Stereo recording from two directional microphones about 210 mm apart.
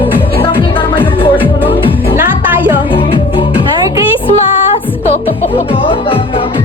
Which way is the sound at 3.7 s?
15° right (ahead or behind).